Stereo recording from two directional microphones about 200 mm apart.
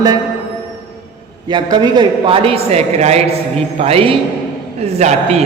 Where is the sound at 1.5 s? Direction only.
20° right (ahead or behind).